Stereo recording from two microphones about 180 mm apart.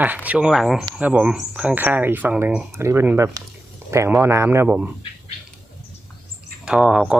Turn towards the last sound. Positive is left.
turn(degrees=-5)  # may be behind; listen again after turning